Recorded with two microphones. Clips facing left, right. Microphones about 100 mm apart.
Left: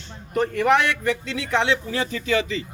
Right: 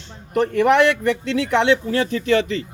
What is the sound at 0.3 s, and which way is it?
A man's voice, 65° right (ahead or behind).